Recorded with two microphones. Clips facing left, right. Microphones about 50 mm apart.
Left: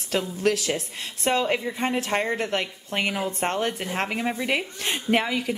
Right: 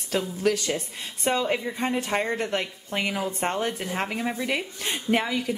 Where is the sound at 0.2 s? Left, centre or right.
Centre.